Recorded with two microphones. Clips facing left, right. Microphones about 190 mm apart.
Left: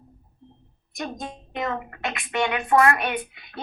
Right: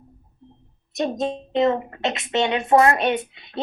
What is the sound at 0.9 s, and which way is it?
Speech, 25° right (ahead or behind).